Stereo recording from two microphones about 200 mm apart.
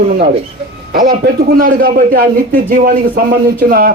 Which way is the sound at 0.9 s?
50° right (ahead or behind).